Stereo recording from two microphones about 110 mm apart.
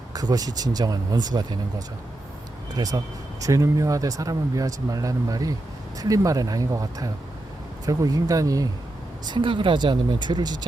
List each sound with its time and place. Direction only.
0.1 s speech: 35° right (ahead or behind)
2.7 s speech: 35° right (ahead or behind)
9.2 s speech: 45° right (ahead or behind)